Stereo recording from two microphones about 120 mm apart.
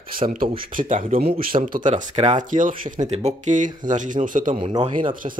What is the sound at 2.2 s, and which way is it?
Speech, 80° right.